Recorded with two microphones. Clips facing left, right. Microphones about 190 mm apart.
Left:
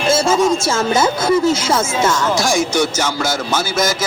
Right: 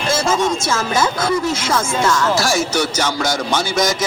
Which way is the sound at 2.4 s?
15° left (ahead or behind).